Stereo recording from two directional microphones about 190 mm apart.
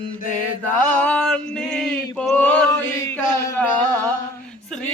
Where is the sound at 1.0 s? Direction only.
5° left (ahead or behind).